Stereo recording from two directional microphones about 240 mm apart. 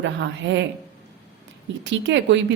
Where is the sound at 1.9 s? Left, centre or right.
Right.